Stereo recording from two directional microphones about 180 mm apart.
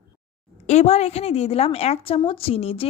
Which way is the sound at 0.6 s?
35° left (ahead or behind).